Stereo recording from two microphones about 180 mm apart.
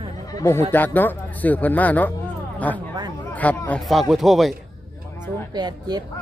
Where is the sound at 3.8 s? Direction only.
Centre (ahead or behind).